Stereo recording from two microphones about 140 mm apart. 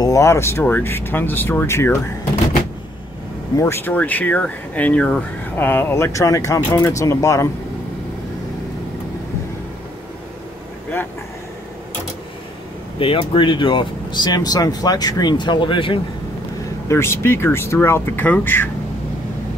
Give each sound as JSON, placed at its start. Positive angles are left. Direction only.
{"t": 0.0, "sound": "speech", "side_deg": 20}
{"t": 3.5, "sound": "speech", "side_deg": 20}
{"t": 13.0, "sound": "speech", "side_deg": 40}
{"t": 16.8, "sound": "speech", "side_deg": 20}